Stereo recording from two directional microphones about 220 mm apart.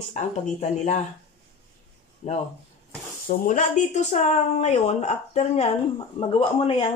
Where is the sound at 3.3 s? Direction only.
35° left (ahead or behind).